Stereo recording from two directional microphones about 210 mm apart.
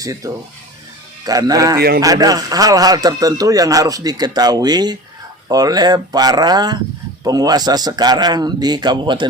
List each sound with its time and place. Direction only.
0.0 s a man's voice: 15° right (ahead or behind)